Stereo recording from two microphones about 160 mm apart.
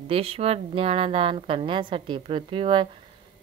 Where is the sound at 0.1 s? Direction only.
35° right (ahead or behind).